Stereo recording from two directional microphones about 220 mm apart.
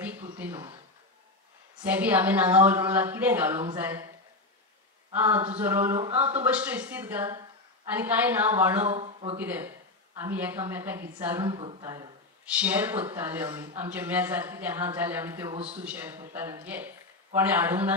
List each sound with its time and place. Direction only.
0.0 s speech: 5° right (ahead or behind)
1.8 s speech: 5° right (ahead or behind)
5.1 s speech: 10° right (ahead or behind)
8.9 s speech: 25° right (ahead or behind)
9.4 s speech: 10° right (ahead or behind)
11.4 s a man's voice: 25° right (ahead or behind); by 17.9 s 10° right (ahead or behind)